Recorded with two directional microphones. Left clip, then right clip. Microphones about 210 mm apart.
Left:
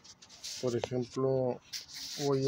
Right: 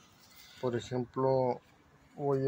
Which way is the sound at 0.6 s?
Centre (ahead or behind).